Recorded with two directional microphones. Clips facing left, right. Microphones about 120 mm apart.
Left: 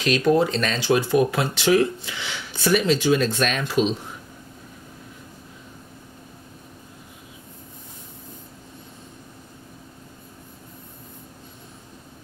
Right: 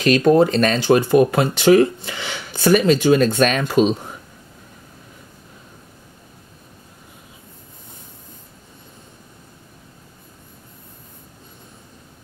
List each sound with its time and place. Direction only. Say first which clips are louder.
0.0 s speech: right 5 dB; 50° right (ahead or behind)